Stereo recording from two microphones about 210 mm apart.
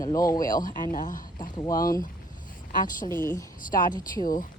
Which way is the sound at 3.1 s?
10° left (ahead or behind).